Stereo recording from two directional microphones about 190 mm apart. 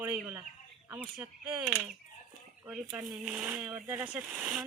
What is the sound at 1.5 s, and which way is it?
Speech, 5° right (ahead or behind).